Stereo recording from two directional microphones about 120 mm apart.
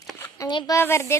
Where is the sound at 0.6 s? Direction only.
20° left (ahead or behind).